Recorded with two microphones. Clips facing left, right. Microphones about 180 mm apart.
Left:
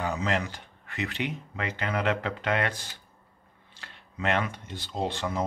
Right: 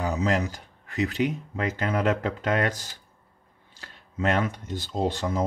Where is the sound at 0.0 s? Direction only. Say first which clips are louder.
Right 4 dB; 40° right (ahead or behind).